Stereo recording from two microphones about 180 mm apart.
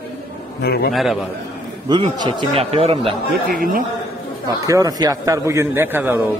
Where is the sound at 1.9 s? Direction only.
25° right (ahead or behind).